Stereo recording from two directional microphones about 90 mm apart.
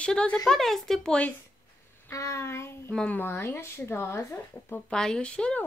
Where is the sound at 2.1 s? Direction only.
35° left (ahead or behind).